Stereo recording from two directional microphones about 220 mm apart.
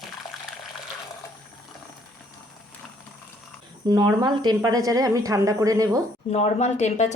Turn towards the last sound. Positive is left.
turn(degrees=30)  # may be behind; listen again after turning